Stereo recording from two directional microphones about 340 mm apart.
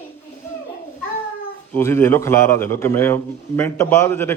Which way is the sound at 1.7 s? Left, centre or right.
Centre.